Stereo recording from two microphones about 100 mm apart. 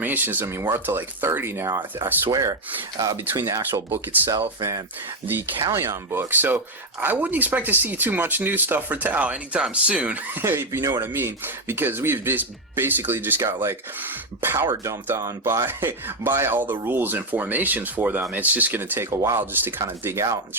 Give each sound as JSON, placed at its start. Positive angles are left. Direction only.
{"t": 0.0, "sound": "speech", "side_deg": -20}
{"t": 5.2, "sound": "speech", "side_deg": -20}